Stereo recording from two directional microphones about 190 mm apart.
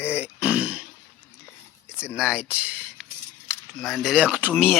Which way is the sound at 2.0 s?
5° right (ahead or behind).